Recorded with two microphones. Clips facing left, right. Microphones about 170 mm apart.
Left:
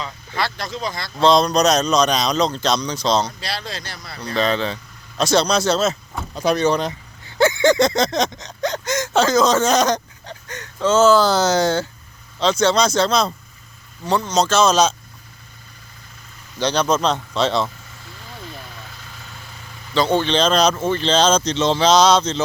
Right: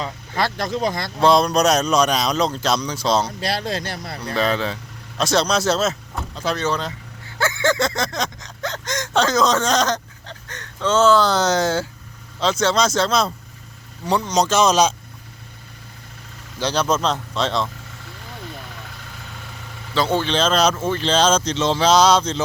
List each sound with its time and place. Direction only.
0.0 s speech: 45° right (ahead or behind)
1.2 s a man's voice: 10° right (ahead or behind)
3.4 s speech: 50° right (ahead or behind)
4.4 s speech: 5° right (ahead or behind)
6.3 s speech: 15° left (ahead or behind)
7.3 s a sound: 15° left (ahead or behind); by 11.9 s 5° right (ahead or behind)
12.4 s speech: centre (ahead or behind)
14.0 s a man's voice: 15° right (ahead or behind)
16.6 s speech: 5° right (ahead or behind)
19.9 s a man's voice: 5° right (ahead or behind)